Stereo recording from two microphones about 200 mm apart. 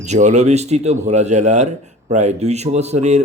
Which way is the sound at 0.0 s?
35° right (ahead or behind).